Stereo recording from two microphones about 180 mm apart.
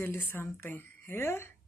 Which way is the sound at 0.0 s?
15° left (ahead or behind).